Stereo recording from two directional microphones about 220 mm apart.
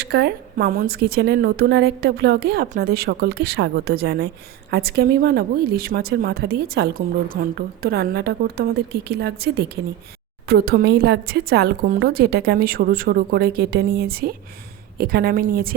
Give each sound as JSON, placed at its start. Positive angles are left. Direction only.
{"t": 0.0, "sound": "speech", "side_deg": -50}